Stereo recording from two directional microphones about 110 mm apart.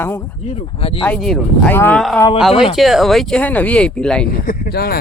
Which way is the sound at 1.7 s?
15° left (ahead or behind).